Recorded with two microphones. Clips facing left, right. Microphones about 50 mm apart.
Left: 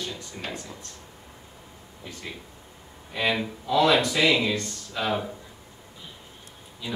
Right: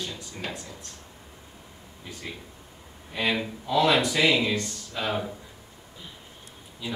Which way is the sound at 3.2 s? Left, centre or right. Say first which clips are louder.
Left 1 dB; centre.